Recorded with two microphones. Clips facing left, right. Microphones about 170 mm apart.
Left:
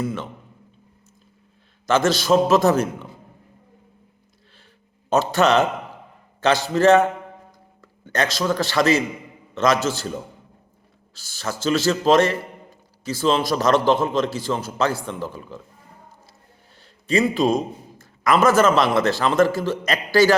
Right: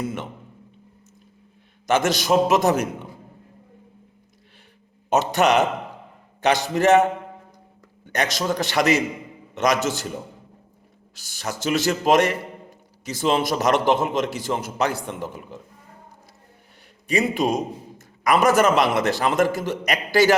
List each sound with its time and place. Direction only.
0.0 s a man's voice: 20° right (ahead or behind)
1.9 s a man's voice: 20° right (ahead or behind)
5.0 s a man's voice: 20° right (ahead or behind)
8.1 s a man's voice: 15° right (ahead or behind)
11.1 s a man's voice: 15° right (ahead or behind)
17.1 s a man's voice: 15° right (ahead or behind)